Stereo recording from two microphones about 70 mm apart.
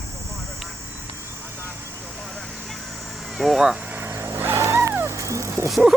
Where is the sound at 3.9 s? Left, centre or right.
Right.